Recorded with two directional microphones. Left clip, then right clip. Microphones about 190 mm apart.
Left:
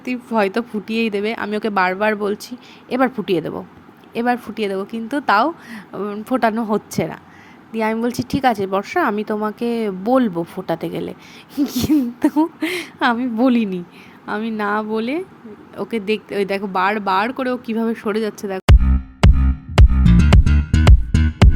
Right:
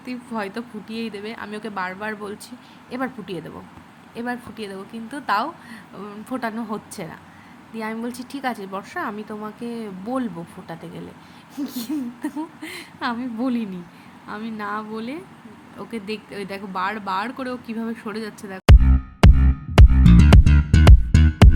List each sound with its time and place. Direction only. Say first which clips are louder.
0.0 s speech: left 10 dB; 40° left (ahead or behind)
19.2 s music: even; centre (ahead or behind)